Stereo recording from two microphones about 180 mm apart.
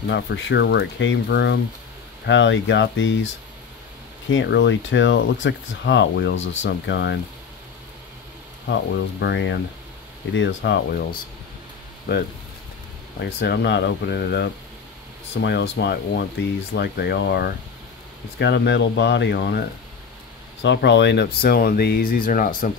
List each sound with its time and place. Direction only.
0.1 s speech: 80° left
2.2 s speech: 90° left
4.3 s speech: 90° left
8.6 s speech: 75° left (ahead or behind)
13.2 s speech: 65° left (ahead or behind)
15.4 s speech: 75° left (ahead or behind)
20.6 s speech: 80° left; by 22.5 s 50° left (ahead or behind)